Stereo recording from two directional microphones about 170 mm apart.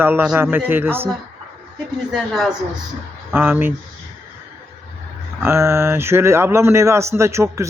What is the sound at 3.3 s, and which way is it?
Speech, 10° right (ahead or behind).